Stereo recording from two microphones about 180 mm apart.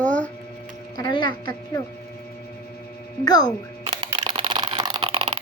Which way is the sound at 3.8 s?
25° right (ahead or behind).